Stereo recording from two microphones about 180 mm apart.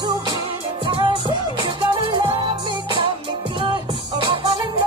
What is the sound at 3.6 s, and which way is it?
Music, 25° right (ahead or behind).